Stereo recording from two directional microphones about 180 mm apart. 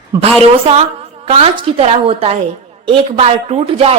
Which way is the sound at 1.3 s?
30° right (ahead or behind).